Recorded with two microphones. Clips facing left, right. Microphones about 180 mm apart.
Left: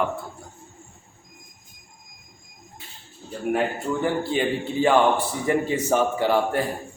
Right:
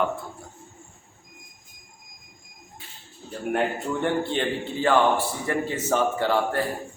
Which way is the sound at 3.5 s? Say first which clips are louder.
Even; 5° left (ahead or behind).